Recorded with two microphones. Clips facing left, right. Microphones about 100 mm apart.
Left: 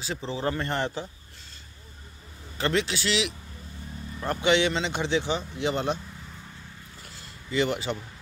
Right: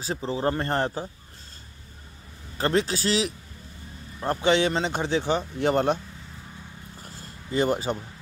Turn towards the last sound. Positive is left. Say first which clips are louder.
# right 2 dB
turn(degrees=-40)  # may be behind; listen again after turning